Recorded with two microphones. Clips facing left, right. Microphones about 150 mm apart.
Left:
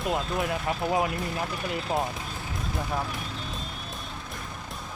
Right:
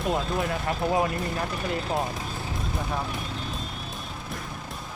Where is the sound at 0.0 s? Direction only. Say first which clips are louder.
Right 1 dB; centre (ahead or behind).